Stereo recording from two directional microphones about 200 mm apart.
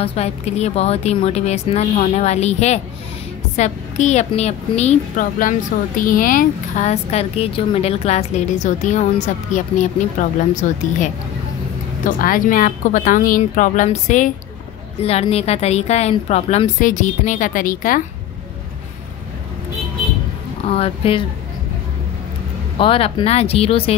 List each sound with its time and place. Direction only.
0.0 s a woman's voice: 30° left (ahead or behind)
20.6 s speech: 30° left (ahead or behind)
22.8 s speech: 25° left (ahead or behind)